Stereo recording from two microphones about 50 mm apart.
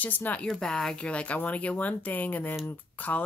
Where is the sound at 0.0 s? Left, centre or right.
Left.